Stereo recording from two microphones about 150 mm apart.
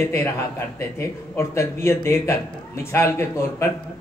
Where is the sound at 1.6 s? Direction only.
15° left (ahead or behind).